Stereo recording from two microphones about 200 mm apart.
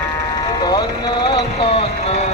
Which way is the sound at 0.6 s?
20° left (ahead or behind).